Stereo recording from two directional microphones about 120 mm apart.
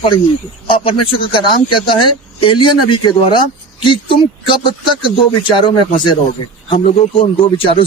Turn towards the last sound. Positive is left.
turn(degrees=50)  # may be behind; listen again after turning